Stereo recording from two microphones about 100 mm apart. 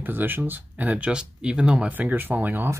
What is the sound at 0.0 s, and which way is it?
Speech, 20° right (ahead or behind).